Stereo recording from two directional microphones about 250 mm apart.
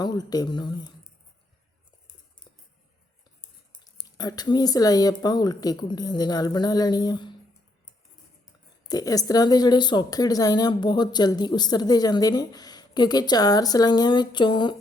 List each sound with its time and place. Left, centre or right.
0.0 s speech: centre
3.8 s speech: centre
8.9 s speech: centre